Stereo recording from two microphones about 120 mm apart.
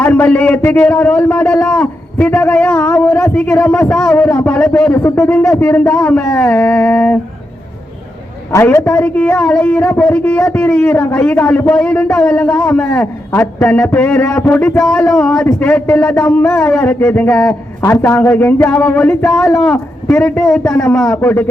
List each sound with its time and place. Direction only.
0.0 s a man's voice: 10° left (ahead or behind)
8.6 s a man's voice: 10° left (ahead or behind)
17.7 s a man's voice: 20° left (ahead or behind)